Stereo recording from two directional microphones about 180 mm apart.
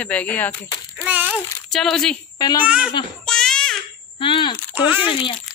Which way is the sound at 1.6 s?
Centre (ahead or behind).